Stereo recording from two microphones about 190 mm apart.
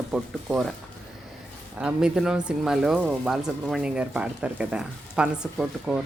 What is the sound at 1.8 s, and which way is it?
Speech, 5° right (ahead or behind).